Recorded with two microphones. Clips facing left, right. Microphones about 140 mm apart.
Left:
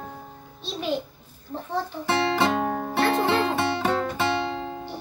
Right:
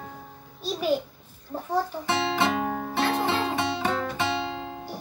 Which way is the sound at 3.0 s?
55° left (ahead or behind).